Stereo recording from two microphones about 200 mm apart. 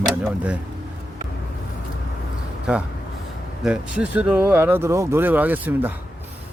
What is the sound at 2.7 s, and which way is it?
Speech, 5° right (ahead or behind).